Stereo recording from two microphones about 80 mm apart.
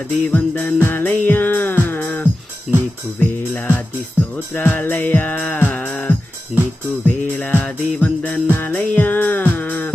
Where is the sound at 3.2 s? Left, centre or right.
Centre.